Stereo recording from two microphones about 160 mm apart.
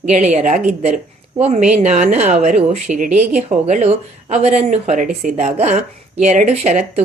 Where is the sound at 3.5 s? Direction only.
45° right (ahead or behind).